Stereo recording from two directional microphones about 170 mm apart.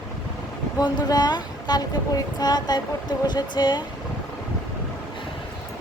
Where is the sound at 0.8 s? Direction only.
25° left (ahead or behind).